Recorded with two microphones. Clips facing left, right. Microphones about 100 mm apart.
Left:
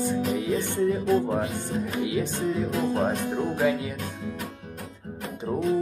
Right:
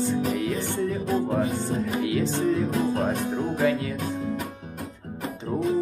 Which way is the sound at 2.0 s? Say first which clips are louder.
Right 1 dB; 20° left (ahead or behind).